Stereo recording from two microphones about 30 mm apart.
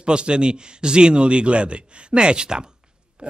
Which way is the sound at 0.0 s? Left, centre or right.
Right.